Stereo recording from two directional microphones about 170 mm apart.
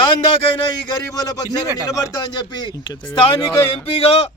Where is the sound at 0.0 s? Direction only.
30° left (ahead or behind).